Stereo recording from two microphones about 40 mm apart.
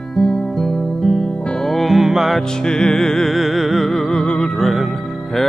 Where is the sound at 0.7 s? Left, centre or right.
Centre.